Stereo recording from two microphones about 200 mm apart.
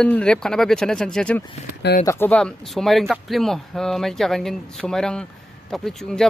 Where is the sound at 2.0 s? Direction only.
10° left (ahead or behind).